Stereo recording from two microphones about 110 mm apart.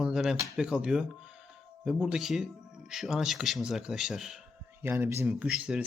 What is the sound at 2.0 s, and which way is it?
Speech, 5° right (ahead or behind).